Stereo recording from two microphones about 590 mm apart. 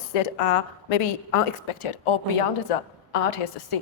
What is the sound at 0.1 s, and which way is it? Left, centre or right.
A woman's voice, left.